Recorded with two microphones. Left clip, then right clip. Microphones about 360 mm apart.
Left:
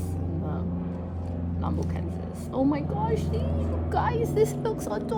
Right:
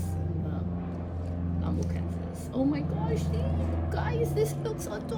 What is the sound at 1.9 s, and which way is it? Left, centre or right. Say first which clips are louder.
Speech: left 2 dB; centre.